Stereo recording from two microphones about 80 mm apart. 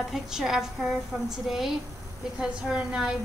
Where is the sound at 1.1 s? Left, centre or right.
Centre.